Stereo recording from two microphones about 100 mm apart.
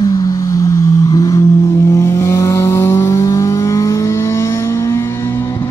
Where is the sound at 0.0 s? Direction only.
35° left (ahead or behind).